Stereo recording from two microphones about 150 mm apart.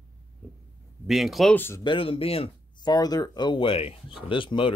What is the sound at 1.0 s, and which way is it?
Speech, centre (ahead or behind).